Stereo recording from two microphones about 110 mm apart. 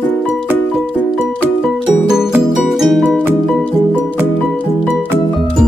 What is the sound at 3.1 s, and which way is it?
Music, 20° right (ahead or behind).